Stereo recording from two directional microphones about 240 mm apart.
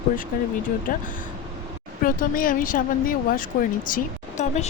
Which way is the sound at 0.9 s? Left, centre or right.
Left.